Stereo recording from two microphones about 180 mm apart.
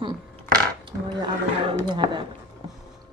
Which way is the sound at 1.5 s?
25° right (ahead or behind).